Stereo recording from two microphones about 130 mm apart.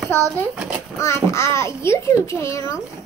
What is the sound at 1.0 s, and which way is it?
A child's voice, 20° left (ahead or behind).